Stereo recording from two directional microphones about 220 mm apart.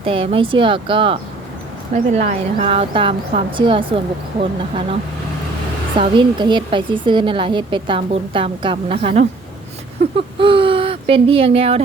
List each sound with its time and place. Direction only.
0.0 s a woman's voice: 25° right (ahead or behind)
6.0 s a woman's voice: 20° right (ahead or behind)